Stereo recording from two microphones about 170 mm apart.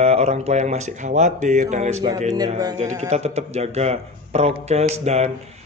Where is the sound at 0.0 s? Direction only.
40° right (ahead or behind).